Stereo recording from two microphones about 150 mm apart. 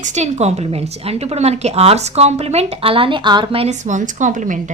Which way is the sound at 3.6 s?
55° right (ahead or behind).